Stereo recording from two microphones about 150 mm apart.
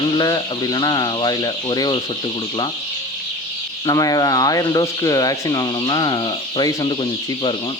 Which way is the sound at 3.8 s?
25° left (ahead or behind).